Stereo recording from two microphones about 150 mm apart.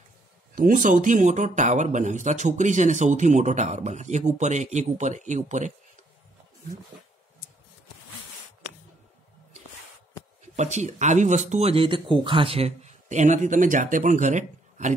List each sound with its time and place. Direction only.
0.6 s speech: 65° right (ahead or behind)
10.5 s speech: 50° right (ahead or behind)